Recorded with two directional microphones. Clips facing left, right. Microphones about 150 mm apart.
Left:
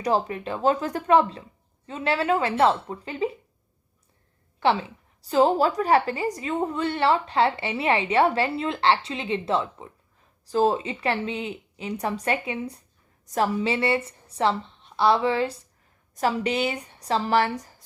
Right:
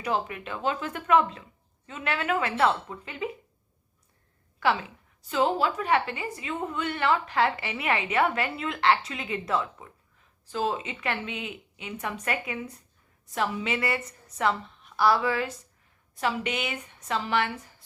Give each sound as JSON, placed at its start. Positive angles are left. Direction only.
{"t": 0.0, "sound": "a woman's voice", "side_deg": 35}
{"t": 4.6, "sound": "a woman's voice", "side_deg": 30}